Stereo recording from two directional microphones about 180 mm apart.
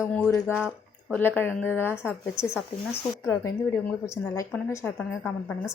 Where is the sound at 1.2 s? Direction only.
10° left (ahead or behind).